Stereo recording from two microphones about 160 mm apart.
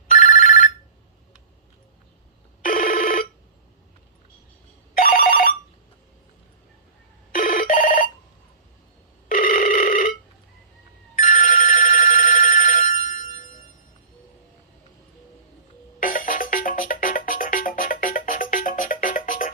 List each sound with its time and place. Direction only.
0.1 s telephone bell ringing: 55° left (ahead or behind)
2.6 s telephone bell ringing: 60° left (ahead or behind)
4.9 s telephone bell ringing: 60° left (ahead or behind)
7.3 s telephone bell ringing: 60° left (ahead or behind)
9.3 s telephone bell ringing: 60° left (ahead or behind)
16.0 s music: 60° left (ahead or behind)